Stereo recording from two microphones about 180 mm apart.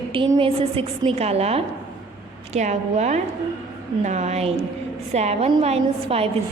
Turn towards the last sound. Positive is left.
turn(degrees=-35)  # may be behind; listen again after turning